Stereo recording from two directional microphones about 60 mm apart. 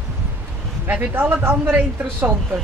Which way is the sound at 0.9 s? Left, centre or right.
Right.